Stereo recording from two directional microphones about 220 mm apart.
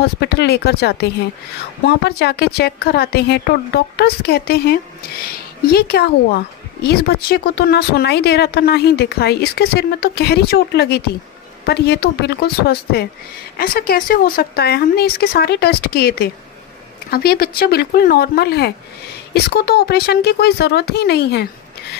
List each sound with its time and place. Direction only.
0.0 s a woman's voice: 50° left (ahead or behind)